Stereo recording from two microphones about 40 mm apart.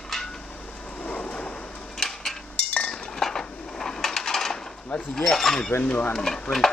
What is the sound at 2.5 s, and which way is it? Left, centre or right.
Chink, left.